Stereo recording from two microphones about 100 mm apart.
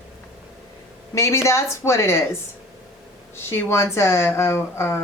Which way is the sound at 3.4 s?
25° left (ahead or behind).